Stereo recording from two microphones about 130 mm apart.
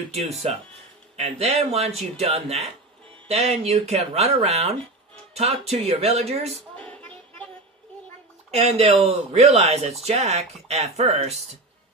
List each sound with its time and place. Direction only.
0.1 s speech: 55° right (ahead or behind)
6.7 s music: 10° left (ahead or behind)
8.4 s speech: 55° right (ahead or behind)